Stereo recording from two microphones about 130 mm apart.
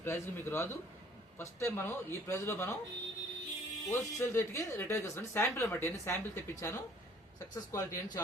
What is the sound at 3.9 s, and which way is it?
Speech, 20° left (ahead or behind).